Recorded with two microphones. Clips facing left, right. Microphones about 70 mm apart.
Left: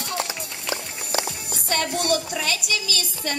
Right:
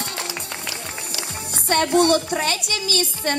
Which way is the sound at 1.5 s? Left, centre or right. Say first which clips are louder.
Right 9 dB; right.